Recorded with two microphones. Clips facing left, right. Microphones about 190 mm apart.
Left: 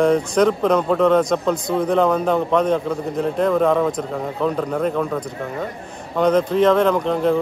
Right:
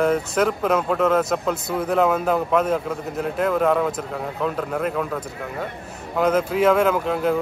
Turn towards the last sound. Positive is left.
turn(degrees=-5)  # may be behind; listen again after turning